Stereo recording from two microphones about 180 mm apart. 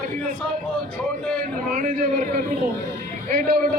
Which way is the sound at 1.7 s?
45° right (ahead or behind).